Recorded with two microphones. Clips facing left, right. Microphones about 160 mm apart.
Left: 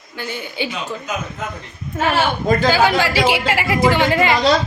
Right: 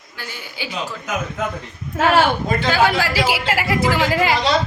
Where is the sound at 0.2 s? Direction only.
20° left (ahead or behind).